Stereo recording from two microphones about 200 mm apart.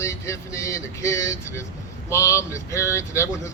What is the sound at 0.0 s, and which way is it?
Speech, 15° left (ahead or behind).